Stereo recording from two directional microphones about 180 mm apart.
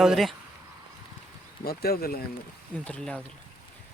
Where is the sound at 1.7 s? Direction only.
60° left (ahead or behind).